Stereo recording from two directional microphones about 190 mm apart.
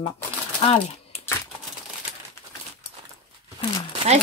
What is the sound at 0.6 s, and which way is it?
Speech, 30° left (ahead or behind).